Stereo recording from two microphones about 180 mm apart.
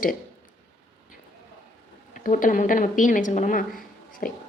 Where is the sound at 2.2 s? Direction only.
50° left (ahead or behind).